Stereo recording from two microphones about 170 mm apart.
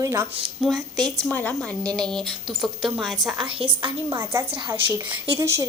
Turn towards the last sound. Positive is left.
turn(degrees=-15)  # may be behind; listen again after turning